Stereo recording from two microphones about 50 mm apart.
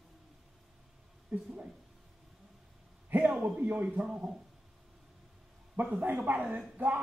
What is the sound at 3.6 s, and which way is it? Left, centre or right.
Speech, right.